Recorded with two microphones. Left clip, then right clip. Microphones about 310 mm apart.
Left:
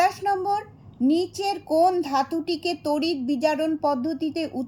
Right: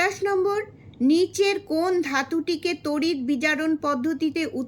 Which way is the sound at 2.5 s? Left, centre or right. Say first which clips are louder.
Left 1 dB; right.